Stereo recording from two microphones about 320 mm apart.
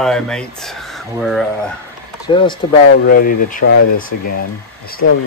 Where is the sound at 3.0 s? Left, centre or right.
Left.